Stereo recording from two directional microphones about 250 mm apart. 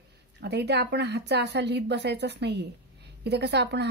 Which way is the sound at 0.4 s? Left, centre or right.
Right.